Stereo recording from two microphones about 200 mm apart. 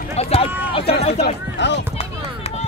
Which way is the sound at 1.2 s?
60° left (ahead or behind).